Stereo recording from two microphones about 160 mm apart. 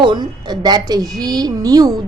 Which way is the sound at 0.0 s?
30° right (ahead or behind).